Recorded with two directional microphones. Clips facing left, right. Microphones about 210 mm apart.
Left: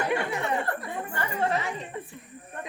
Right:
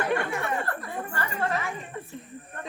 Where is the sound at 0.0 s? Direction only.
15° left (ahead or behind).